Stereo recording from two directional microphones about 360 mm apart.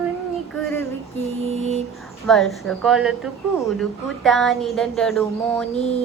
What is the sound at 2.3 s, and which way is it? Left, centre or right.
A woman's voice, centre.